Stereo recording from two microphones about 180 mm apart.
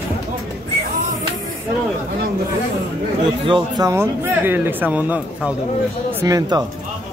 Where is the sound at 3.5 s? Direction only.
25° right (ahead or behind).